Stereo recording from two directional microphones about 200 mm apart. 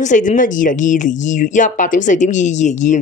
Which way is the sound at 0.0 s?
40° left (ahead or behind).